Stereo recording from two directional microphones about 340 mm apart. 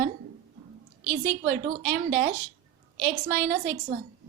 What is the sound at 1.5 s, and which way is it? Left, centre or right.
A woman's voice, right.